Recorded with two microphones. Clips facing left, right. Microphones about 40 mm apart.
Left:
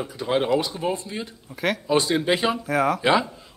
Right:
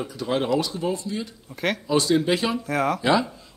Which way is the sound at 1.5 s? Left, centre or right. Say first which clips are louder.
Left 1 dB; centre.